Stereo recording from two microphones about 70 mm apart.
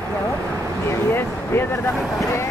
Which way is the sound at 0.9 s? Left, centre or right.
Left.